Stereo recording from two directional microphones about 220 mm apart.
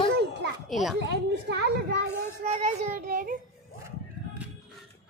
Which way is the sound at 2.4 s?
30° right (ahead or behind).